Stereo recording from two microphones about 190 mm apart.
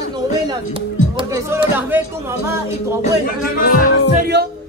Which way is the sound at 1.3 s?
15° right (ahead or behind).